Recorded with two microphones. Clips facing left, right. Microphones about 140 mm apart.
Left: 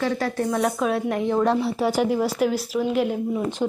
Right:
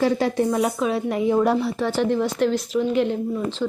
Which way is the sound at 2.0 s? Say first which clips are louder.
Right 2 dB; 10° left (ahead or behind).